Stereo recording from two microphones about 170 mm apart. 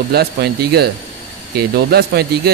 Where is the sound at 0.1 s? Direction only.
70° right (ahead or behind).